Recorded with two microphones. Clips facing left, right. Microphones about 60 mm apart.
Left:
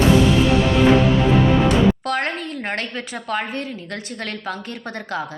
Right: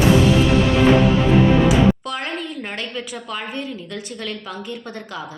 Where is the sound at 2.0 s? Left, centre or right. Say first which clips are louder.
Left 4 dB; left.